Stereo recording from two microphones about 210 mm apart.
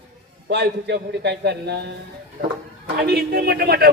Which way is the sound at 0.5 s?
50° right (ahead or behind).